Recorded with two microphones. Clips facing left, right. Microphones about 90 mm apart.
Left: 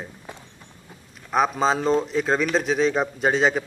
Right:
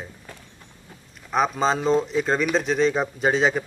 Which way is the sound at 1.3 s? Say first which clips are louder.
Left 1 dB; centre (ahead or behind).